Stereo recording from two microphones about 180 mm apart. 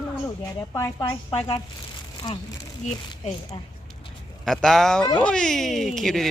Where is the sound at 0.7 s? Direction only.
20° left (ahead or behind).